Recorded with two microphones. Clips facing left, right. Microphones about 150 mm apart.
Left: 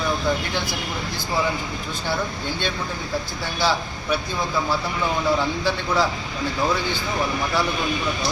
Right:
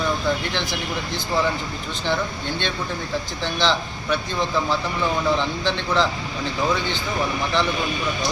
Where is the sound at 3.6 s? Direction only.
10° left (ahead or behind).